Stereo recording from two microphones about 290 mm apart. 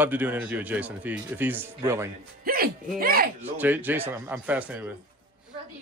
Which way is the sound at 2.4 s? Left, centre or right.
Right.